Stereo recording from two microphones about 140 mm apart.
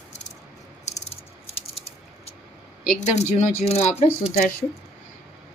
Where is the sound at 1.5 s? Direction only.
45° left (ahead or behind).